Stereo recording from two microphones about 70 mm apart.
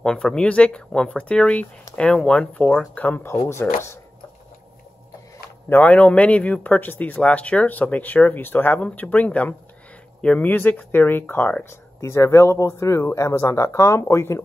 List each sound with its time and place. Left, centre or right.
0.0 s speech: centre
2.9 s speech: left
3.3 s speech: left
5.7 s speech: left
11.7 s speech: left